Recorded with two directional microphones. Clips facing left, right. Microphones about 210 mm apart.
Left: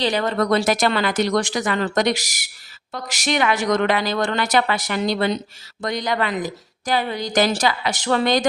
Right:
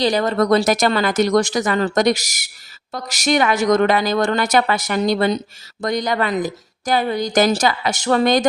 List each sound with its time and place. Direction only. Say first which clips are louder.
0.0 s speech: right 3 dB; 40° right (ahead or behind)